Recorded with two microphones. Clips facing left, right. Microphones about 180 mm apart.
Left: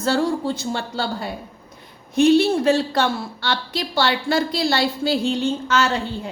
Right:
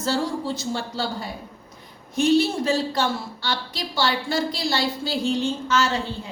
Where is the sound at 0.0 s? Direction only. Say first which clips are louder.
Left 4 dB; 60° left (ahead or behind).